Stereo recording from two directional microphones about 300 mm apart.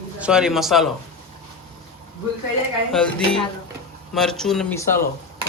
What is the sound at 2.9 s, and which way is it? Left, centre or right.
Speech, centre.